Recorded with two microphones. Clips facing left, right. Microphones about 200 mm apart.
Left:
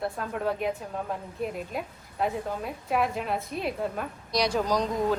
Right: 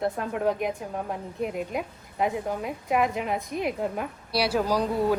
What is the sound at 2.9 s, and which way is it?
A woman's voice, 15° right (ahead or behind).